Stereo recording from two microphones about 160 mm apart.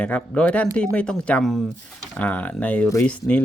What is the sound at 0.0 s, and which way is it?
Speech, 5° left (ahead or behind).